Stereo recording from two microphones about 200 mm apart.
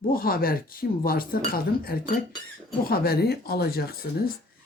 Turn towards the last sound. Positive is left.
turn(degrees=50)  # may be behind; listen again after turning